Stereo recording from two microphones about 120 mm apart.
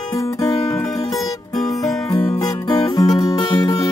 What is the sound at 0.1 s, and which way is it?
Music, 25° left (ahead or behind).